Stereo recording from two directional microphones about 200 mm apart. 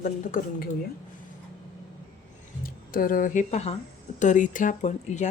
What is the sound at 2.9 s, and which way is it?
Speech, 45° left (ahead or behind).